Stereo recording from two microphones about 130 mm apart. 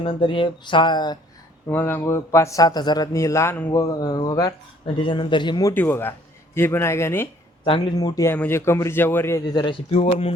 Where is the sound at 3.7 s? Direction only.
30° left (ahead or behind).